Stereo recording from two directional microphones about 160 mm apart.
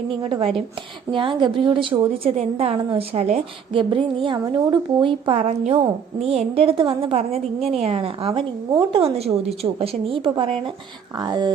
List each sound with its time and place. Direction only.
0.1 s a woman's voice: 30° right (ahead or behind)
8.3 s speech: 20° right (ahead or behind)
8.9 s a woman's voice: 40° right (ahead or behind)